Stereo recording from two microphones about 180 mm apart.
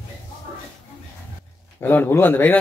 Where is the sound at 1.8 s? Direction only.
10° left (ahead or behind).